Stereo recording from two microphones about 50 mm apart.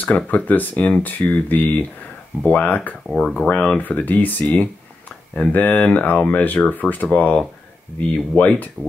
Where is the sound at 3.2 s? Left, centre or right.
Centre.